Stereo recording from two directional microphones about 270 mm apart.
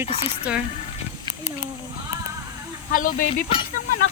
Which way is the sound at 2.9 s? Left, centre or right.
Left.